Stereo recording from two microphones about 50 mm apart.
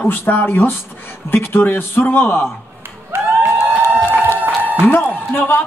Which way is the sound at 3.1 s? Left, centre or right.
Right.